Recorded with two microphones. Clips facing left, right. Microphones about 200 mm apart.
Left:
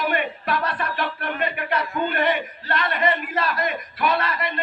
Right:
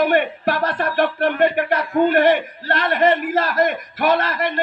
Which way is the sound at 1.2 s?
65° right (ahead or behind).